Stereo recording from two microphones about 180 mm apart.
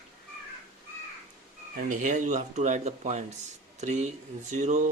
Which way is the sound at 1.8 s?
45° right (ahead or behind).